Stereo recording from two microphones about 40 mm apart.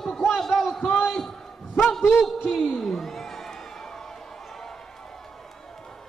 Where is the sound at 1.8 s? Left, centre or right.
Centre.